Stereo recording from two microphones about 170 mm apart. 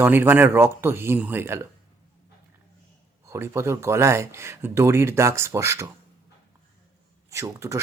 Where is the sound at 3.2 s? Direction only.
15° right (ahead or behind).